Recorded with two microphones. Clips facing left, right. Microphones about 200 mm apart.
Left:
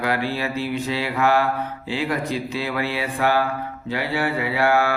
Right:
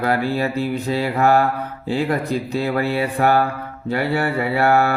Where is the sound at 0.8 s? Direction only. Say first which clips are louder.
Right 4 dB; 45° right (ahead or behind).